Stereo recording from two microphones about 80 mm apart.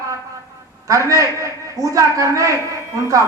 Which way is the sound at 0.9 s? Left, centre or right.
Right.